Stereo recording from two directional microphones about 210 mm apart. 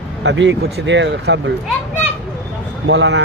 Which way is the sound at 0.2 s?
60° right (ahead or behind).